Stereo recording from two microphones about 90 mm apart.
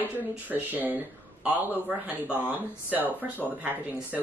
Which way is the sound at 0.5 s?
20° right (ahead or behind).